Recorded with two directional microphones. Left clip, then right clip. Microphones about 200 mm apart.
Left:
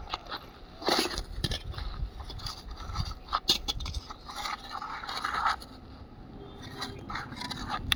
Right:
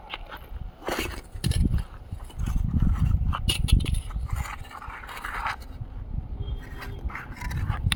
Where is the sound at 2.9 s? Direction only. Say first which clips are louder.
Left 1 dB; 35° right (ahead or behind).